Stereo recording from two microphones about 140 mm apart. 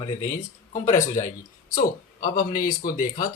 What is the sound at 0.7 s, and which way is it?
Speech, 60° left (ahead or behind).